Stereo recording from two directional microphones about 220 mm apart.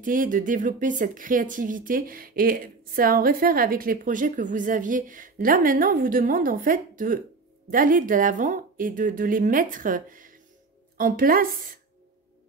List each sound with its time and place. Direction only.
0.0 s speech: 40° right (ahead or behind)